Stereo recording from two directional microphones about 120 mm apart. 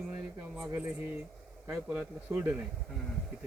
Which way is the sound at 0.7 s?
15° right (ahead or behind).